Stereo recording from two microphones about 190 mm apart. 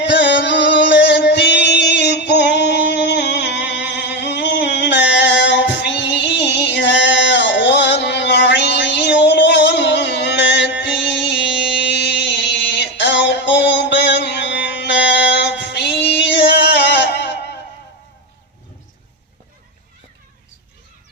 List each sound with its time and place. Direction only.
0.0 s music: 70° left (ahead or behind)
11.5 s music: 5° right (ahead or behind)
11.9 s music: 65° left (ahead or behind)